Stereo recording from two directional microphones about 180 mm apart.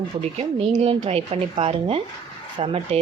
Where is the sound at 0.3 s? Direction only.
35° right (ahead or behind).